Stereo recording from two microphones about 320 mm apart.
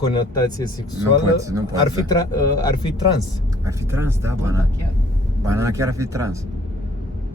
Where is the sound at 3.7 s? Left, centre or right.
Centre.